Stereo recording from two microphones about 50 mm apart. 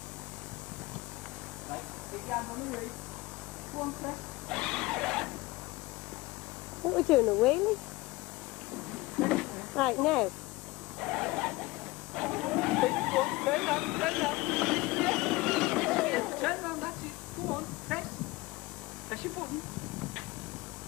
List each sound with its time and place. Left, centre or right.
2.2 s speech: centre
3.8 s speech: centre
4.5 s a sound: centre
6.9 s speech: centre
9.2 s speech: centre
11.0 s a sound: centre